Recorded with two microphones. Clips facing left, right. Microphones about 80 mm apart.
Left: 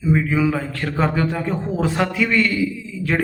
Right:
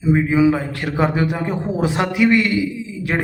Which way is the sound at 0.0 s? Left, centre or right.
Right.